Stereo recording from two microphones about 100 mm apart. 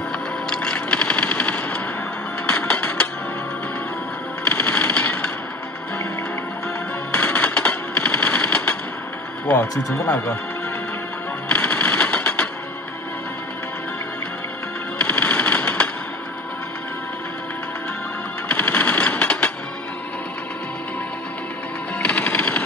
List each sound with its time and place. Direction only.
0.5 s machine gun: 10° left (ahead or behind)
2.6 s music: 10° left (ahead or behind)
4.5 s a sound: 15° left (ahead or behind)
7.1 s a sound: 10° left (ahead or behind)
9.8 s speech: 35° left (ahead or behind)
11.4 s music: 10° left (ahead or behind)
15.0 s music: 10° left (ahead or behind)
18.5 s a sound: 15° left (ahead or behind)
21.9 s music: 15° left (ahead or behind)